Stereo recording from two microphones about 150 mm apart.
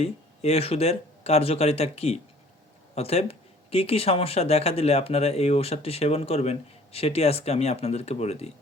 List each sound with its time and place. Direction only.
0.0 s speech: 45° left (ahead or behind)